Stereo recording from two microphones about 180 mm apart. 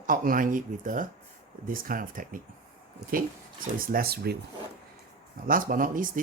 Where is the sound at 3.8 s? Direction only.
55° right (ahead or behind).